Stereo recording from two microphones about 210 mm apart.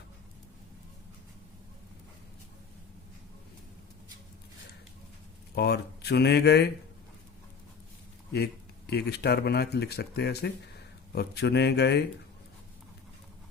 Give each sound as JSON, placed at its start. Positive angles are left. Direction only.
{"t": 5.5, "sound": "speech", "side_deg": 50}
{"t": 8.9, "sound": "speech", "side_deg": 50}